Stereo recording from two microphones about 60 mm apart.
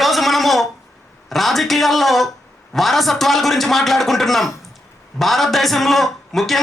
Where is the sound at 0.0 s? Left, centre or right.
Centre.